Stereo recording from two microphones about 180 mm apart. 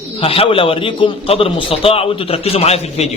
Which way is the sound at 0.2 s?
30° left (ahead or behind).